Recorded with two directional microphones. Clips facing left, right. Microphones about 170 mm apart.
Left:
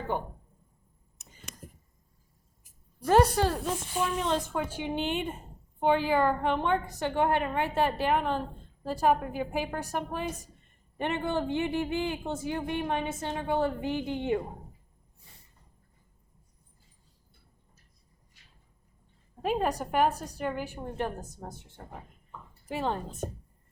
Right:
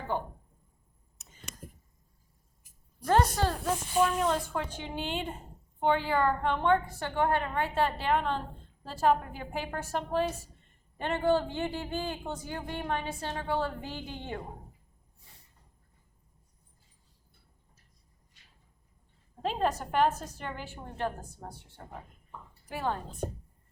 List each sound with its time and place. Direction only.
3.1 s a woman's voice: 15° left (ahead or behind)
19.4 s speech: 10° left (ahead or behind)
22.6 s a woman's voice: 25° left (ahead or behind)